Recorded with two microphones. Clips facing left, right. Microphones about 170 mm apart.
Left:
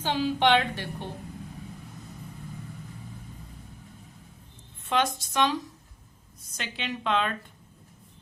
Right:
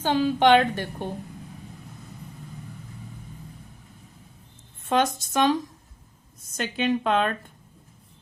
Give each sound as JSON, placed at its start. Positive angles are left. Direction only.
{"t": 0.0, "sound": "a woman's voice", "side_deg": -50}
{"t": 4.9, "sound": "a woman's voice", "side_deg": -45}
{"t": 6.6, "sound": "a woman's voice", "side_deg": -50}